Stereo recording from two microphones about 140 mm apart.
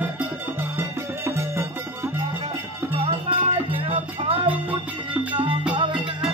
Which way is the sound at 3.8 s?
40° right (ahead or behind).